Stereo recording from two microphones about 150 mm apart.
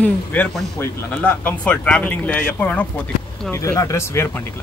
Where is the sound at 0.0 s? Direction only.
10° left (ahead or behind).